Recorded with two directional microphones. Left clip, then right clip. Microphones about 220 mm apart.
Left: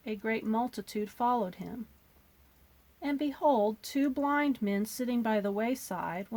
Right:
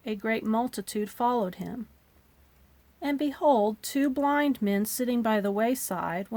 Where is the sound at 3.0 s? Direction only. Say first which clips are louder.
Right 3 dB; 35° right (ahead or behind).